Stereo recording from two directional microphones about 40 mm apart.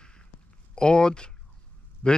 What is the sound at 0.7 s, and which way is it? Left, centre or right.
Speech, left.